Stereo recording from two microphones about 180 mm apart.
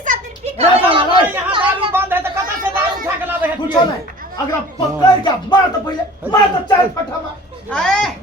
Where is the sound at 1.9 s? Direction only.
10° right (ahead or behind).